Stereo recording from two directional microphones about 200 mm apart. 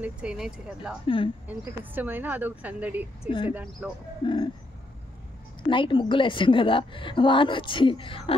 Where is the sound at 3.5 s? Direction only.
10° right (ahead or behind).